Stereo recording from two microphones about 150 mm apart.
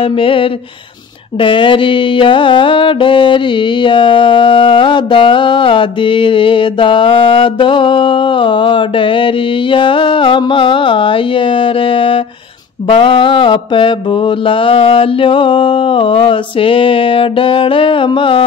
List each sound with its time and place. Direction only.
0.0 s music: 35° left (ahead or behind)